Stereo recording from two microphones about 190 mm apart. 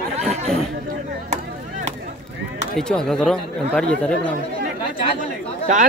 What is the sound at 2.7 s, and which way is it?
Speech, centre (ahead or behind).